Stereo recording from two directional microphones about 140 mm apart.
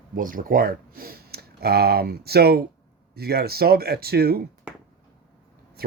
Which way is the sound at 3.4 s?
90° right.